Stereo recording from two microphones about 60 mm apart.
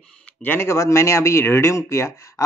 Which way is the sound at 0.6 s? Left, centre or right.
Left.